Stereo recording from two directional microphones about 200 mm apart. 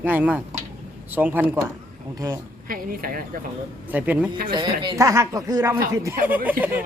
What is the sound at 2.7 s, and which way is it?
Speech, 45° right (ahead or behind).